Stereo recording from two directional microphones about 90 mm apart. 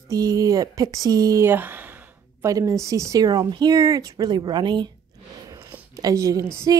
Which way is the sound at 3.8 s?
35° right (ahead or behind).